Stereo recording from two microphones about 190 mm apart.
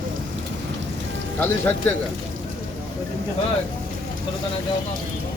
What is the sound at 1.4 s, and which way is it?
Speech, 10° left (ahead or behind).